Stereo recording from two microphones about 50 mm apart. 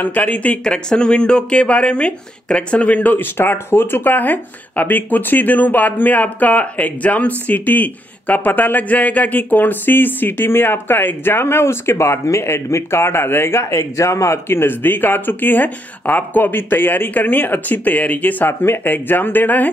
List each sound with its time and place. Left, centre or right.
0.0 s speech: left
0.7 s speech: centre
3.2 s speech: left
14.5 s speech: left
18.5 s speech: left